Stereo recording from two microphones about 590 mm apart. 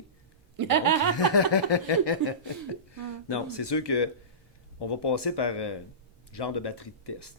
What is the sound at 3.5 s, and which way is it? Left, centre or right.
Speech, left.